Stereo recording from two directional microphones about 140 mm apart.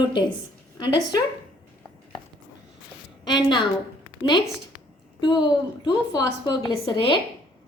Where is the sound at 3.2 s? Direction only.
30° left (ahead or behind).